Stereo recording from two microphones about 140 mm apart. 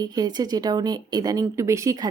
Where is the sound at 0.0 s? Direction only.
30° right (ahead or behind).